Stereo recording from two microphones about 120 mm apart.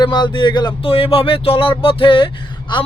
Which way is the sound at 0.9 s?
50° left (ahead or behind).